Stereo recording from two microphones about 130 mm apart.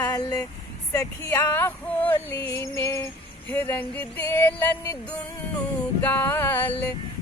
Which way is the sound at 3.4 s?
15° left (ahead or behind).